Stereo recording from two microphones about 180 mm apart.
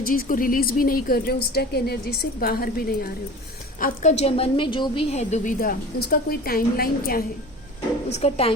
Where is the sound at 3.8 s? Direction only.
40° left (ahead or behind).